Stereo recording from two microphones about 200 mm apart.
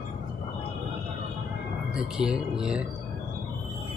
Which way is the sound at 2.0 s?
5° right (ahead or behind).